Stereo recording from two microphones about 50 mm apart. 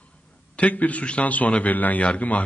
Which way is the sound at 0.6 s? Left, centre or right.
Left.